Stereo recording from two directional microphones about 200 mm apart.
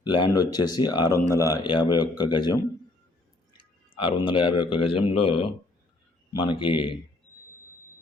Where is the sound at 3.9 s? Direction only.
25° left (ahead or behind).